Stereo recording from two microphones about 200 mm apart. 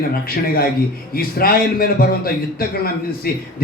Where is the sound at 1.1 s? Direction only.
50° left (ahead or behind).